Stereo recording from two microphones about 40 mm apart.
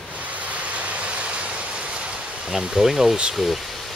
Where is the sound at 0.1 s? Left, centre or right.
Right; by 3.2 s centre.